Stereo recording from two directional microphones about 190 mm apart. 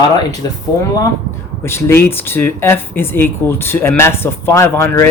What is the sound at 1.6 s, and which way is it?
Speech, 10° left (ahead or behind).